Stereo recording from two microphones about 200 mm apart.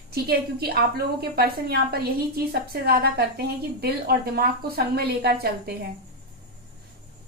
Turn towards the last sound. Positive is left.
turn(degrees=-50)  # may be behind; listen again after turning